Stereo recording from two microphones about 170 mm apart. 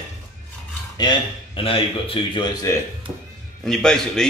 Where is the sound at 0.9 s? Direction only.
30° left (ahead or behind).